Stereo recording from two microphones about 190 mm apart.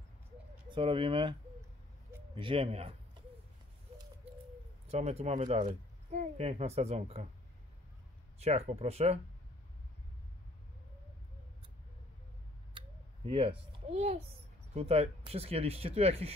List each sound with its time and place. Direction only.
0.7 s a child's voice: 30° right (ahead or behind)
2.3 s speech: 30° right (ahead or behind)
4.8 s speech: 35° right (ahead or behind)
8.4 s speech: 35° right (ahead or behind)
13.3 s a child's voice: 30° right (ahead or behind)